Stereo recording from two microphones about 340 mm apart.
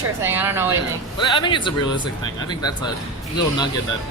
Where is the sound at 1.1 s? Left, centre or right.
Centre.